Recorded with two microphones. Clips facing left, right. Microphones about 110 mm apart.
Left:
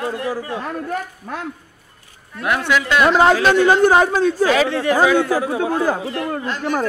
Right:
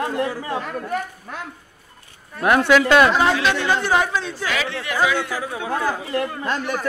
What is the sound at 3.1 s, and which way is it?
Speech, 45° left (ahead or behind).